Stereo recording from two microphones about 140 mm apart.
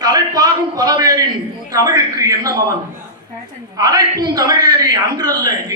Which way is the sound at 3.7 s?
25° right (ahead or behind).